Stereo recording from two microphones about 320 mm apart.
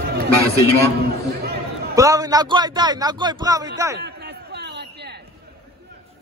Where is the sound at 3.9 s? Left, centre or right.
Right.